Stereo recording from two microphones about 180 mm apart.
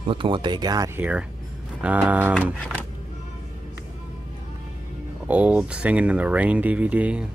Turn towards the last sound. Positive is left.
turn(degrees=-5)  # may be behind; listen again after turning